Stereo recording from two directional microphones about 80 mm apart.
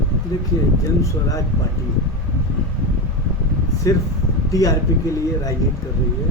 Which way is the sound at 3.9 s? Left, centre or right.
Left.